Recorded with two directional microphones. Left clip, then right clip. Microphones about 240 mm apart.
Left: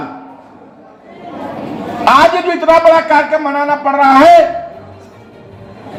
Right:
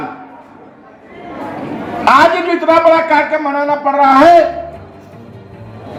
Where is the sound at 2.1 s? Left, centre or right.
Left.